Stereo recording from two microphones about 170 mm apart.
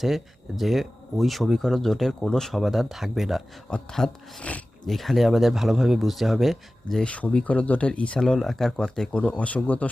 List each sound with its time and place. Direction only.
0.0 s speech: centre (ahead or behind)